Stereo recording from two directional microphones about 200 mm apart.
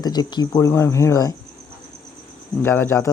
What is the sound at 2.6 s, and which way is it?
Speech, 10° left (ahead or behind).